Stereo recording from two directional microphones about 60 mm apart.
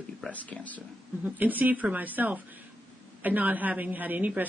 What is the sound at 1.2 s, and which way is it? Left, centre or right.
Speech, right.